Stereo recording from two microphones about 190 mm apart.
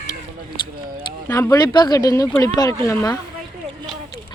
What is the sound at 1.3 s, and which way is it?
Speech, 15° left (ahead or behind).